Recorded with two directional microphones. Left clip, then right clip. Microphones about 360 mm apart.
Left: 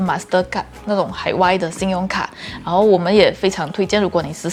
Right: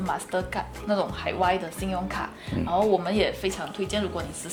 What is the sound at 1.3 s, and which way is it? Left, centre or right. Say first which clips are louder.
Speech: left 9 dB; left.